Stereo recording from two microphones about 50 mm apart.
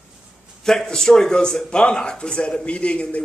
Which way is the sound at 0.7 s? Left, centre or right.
Centre.